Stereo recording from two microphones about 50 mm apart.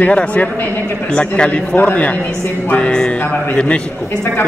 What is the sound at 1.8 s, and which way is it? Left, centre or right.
A man's voice, left.